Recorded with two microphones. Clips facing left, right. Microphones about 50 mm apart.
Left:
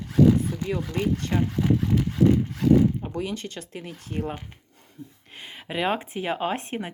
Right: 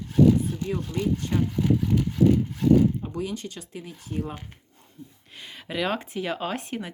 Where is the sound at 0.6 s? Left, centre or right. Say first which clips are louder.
Left 1 dB; left.